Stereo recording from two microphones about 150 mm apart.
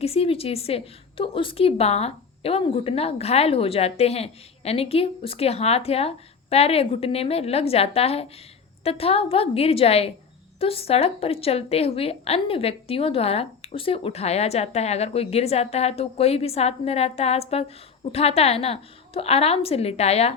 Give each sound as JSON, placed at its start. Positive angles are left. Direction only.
{"t": 0.0, "sound": "a woman's voice", "side_deg": 40}